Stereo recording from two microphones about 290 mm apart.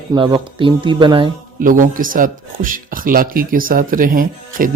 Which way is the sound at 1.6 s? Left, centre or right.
Right.